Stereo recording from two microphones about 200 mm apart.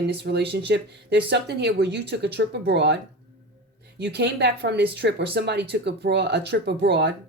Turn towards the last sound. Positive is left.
turn(degrees=-60)  # may be behind; listen again after turning